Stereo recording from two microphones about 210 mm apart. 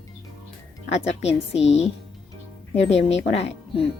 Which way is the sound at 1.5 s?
30° left (ahead or behind).